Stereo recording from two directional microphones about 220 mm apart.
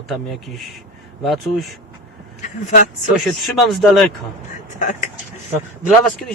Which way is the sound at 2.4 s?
35° left (ahead or behind).